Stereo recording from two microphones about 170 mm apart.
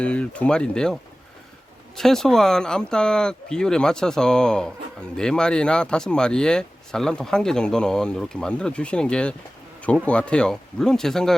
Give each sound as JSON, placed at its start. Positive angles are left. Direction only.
{"t": 0.0, "sound": "speech", "side_deg": 5}
{"t": 2.0, "sound": "speech", "side_deg": 5}